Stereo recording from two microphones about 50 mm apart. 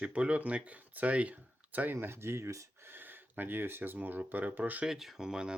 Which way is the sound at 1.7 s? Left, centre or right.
Right.